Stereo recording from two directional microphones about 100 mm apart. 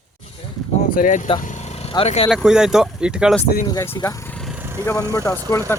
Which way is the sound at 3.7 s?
30° left (ahead or behind).